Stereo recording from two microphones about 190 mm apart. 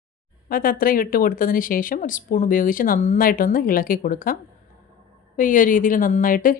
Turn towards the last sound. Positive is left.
turn(degrees=45)  # may be behind; listen again after turning